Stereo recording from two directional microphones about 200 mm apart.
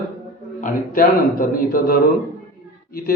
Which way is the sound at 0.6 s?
45° left (ahead or behind).